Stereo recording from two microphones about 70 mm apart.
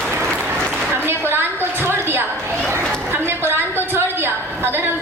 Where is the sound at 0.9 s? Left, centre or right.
Right.